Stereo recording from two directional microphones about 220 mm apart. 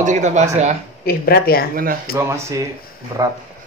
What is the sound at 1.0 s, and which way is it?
Speech, 45° left (ahead or behind).